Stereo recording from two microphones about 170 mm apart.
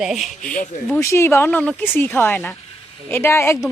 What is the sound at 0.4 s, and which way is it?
Speech, 50° left (ahead or behind).